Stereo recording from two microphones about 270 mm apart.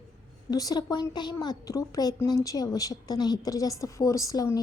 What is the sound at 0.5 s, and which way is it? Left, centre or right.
A woman's voice, centre.